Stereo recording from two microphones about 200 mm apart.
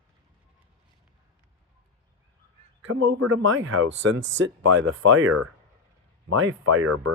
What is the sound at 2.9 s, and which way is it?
Speech, 80° right.